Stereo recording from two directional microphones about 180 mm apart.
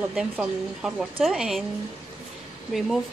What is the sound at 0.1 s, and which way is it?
Speech, 5° right (ahead or behind).